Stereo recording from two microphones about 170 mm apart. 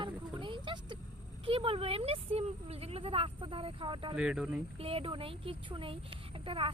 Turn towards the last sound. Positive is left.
turn(degrees=-30)  # may be behind; listen again after turning